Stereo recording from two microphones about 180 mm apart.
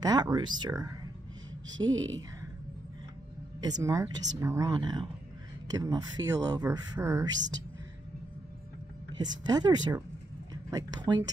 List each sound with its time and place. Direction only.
0.0 s speech: 20° right (ahead or behind)
2.0 s a woman's voice: 90° right
3.6 s speech: 20° right (ahead or behind)
9.2 s speech: 20° right (ahead or behind)